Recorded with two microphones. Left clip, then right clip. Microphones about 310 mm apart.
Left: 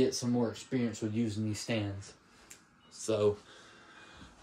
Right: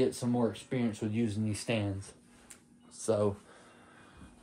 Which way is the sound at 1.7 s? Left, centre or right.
Right.